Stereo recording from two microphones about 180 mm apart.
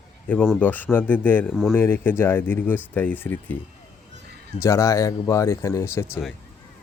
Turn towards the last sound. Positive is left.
turn(degrees=15)  # may be behind; listen again after turning